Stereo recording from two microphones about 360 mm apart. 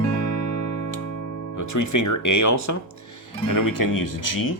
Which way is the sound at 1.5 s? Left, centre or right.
Left.